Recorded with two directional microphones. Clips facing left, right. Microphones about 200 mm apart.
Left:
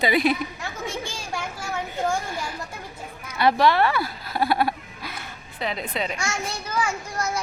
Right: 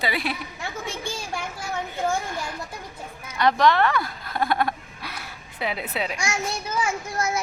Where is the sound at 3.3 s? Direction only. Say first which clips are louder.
Even; 10° left (ahead or behind); by 6.3 s 10° right (ahead or behind).